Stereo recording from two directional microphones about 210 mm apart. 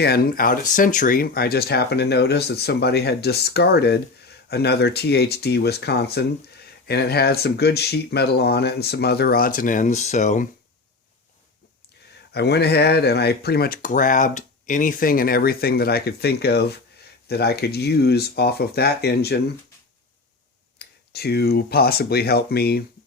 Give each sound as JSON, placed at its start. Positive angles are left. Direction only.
{"t": 0.0, "sound": "speech", "side_deg": 45}
{"t": 12.3, "sound": "speech", "side_deg": 50}
{"t": 20.7, "sound": "speech", "side_deg": 50}